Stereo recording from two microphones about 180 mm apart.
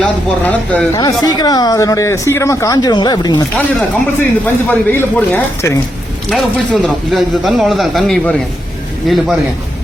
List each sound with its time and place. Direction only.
0.0 s speech: 5° left (ahead or behind)
0.9 s speech: 20° left (ahead or behind)
3.5 s speech: 10° left (ahead or behind)
6.3 s speech: centre (ahead or behind)